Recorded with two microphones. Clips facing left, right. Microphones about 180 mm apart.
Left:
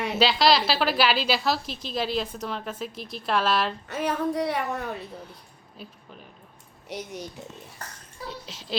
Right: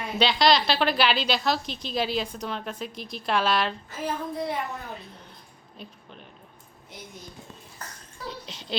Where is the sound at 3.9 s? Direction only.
70° left (ahead or behind).